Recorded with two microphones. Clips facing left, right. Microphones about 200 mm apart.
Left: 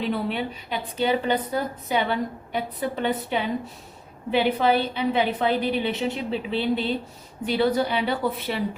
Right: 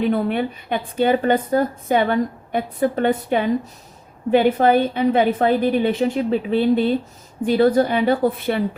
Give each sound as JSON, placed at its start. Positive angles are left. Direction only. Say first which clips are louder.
{"t": 0.0, "sound": "a woman's voice", "louder": "right 7 dB", "side_deg": -50}